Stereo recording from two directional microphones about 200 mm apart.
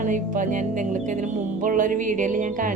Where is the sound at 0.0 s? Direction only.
40° right (ahead or behind).